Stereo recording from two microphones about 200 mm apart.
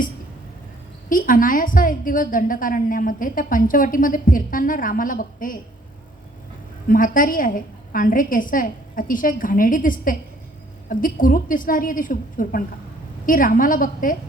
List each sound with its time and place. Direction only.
1.1 s a woman's voice: 45° left (ahead or behind)
6.8 s a woman's voice: 45° left (ahead or behind)